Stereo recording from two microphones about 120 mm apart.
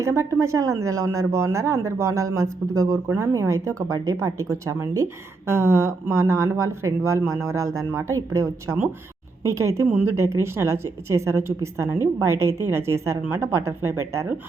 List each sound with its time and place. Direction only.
0.0 s speech: 25° right (ahead or behind)